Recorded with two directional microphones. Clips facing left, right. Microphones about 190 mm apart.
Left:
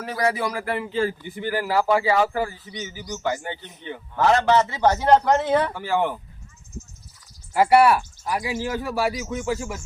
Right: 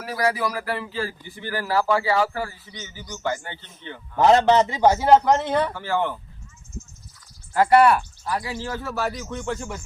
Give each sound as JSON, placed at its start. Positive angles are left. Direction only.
{"t": 0.0, "sound": "a man's voice", "side_deg": 25}
{"t": 4.2, "sound": "a man's voice", "side_deg": -20}
{"t": 5.7, "sound": "speech", "side_deg": 15}
{"t": 7.5, "sound": "speech", "side_deg": 10}